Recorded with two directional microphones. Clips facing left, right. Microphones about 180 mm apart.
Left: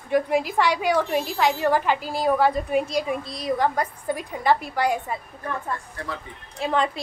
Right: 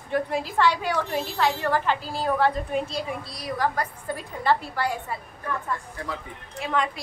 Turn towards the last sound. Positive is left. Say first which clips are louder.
# left 3 dB
turn(degrees=30)  # may be behind; listen again after turning